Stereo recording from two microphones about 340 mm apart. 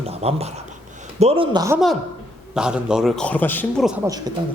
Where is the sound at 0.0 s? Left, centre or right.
Centre.